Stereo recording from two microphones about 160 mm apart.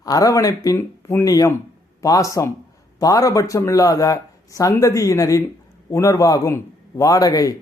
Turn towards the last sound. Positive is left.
turn(degrees=20)  # may be behind; listen again after turning